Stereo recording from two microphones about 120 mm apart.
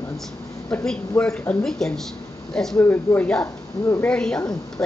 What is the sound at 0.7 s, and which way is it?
A woman's voice, 10° left (ahead or behind).